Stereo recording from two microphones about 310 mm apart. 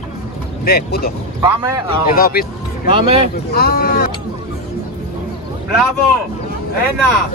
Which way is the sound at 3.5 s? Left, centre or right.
Left.